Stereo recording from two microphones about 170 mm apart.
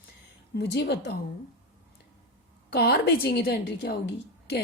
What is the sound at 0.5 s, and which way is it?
Speech, 85° left.